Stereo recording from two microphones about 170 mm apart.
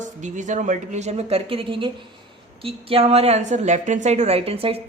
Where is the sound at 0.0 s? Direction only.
45° right (ahead or behind).